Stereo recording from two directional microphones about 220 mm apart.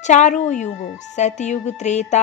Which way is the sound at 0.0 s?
35° left (ahead or behind).